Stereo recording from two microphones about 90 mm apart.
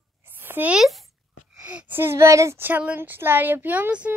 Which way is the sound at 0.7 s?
Centre (ahead or behind).